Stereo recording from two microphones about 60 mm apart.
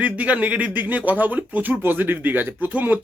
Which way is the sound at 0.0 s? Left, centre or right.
Right.